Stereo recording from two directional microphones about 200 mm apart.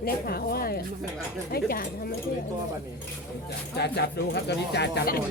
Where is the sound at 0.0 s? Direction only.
50° left (ahead or behind).